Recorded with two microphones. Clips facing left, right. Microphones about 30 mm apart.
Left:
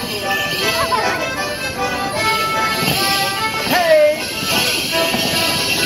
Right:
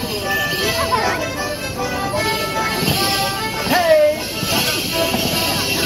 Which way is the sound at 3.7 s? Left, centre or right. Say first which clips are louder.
Left 1 dB; centre.